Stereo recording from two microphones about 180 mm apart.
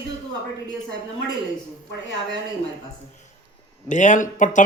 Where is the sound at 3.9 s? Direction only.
45° left (ahead or behind).